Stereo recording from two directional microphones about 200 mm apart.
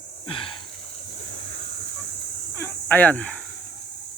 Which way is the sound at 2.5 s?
10° left (ahead or behind).